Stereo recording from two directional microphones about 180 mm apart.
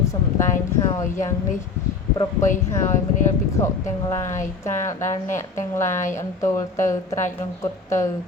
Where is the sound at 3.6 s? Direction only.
15° left (ahead or behind).